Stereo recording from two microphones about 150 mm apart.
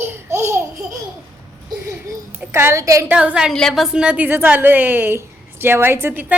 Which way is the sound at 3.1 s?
5° right (ahead or behind).